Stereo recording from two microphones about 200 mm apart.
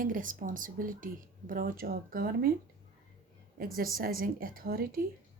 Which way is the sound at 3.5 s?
45° right (ahead or behind).